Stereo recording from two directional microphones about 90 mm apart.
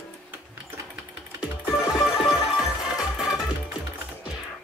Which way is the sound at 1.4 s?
5° right (ahead or behind).